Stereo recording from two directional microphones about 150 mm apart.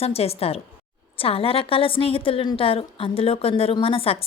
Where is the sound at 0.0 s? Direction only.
40° left (ahead or behind).